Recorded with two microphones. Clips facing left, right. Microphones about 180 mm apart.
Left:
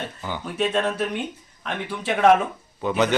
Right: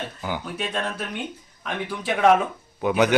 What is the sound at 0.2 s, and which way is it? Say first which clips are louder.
Speech: right 1 dB; 10° right (ahead or behind).